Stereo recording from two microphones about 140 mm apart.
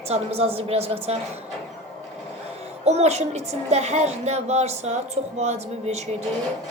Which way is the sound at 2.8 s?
50° right (ahead or behind).